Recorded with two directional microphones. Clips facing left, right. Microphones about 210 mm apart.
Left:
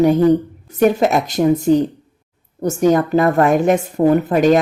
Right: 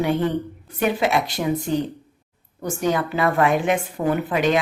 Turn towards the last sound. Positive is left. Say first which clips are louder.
# left 7 dB
turn(degrees=45)  # may be behind; listen again after turning